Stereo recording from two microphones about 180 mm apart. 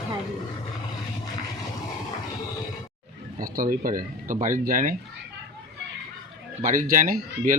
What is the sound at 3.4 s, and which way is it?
Speech, 50° right (ahead or behind).